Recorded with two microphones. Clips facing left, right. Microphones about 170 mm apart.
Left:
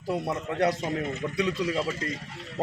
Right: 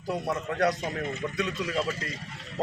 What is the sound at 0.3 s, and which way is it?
A man's voice, 30° left (ahead or behind).